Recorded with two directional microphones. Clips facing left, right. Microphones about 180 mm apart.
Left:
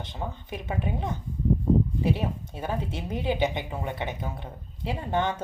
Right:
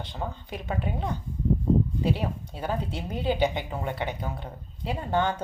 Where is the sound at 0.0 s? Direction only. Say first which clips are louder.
Right 1 dB; 20° left (ahead or behind).